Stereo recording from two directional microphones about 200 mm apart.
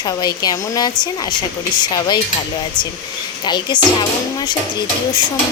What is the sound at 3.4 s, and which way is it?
Speech, 20° left (ahead or behind).